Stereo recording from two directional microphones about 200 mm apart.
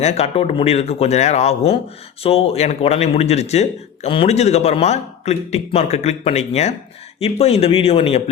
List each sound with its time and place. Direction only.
0.0 s speech: 30° left (ahead or behind)